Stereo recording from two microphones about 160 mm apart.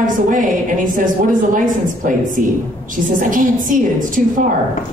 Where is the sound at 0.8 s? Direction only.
55° right (ahead or behind).